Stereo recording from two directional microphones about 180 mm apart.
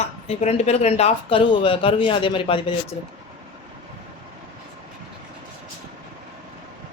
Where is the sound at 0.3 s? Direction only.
35° left (ahead or behind).